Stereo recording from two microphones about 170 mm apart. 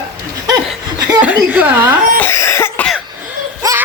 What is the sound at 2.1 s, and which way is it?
Cough, 15° left (ahead or behind).